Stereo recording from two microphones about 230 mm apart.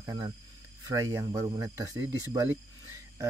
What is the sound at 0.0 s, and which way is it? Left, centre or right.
Speech, centre.